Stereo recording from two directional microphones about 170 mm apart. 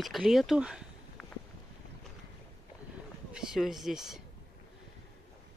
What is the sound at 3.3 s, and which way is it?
Speech, 5° right (ahead or behind).